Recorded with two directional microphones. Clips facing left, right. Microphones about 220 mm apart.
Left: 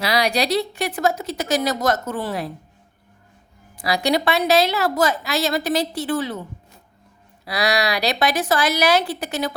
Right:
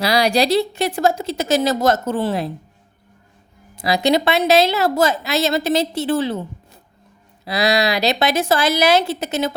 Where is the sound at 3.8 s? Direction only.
25° right (ahead or behind).